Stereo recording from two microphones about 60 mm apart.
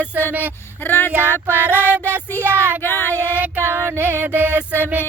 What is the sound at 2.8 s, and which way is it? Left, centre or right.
Female singing, left.